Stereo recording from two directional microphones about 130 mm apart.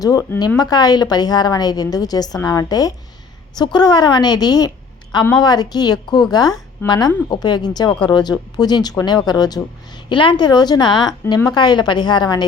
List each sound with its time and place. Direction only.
0.0 s a woman's voice: 30° left (ahead or behind)